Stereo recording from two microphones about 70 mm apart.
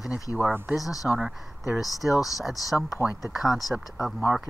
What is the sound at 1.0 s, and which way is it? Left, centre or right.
Speech, centre.